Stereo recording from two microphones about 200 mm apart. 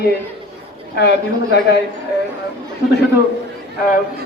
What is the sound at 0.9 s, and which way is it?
Speech, 55° left (ahead or behind).